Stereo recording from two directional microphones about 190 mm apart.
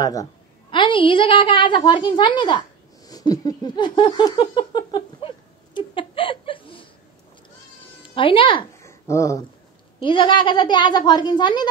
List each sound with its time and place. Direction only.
0.0 s a woman's voice: 20° left (ahead or behind)
3.1 s a sound: 20° left (ahead or behind)
5.8 s chuckle: 25° left (ahead or behind)
8.0 s speech: 30° left (ahead or behind)
8.8 s a sound: 15° left (ahead or behind)
10.0 s a woman's voice: 25° left (ahead or behind)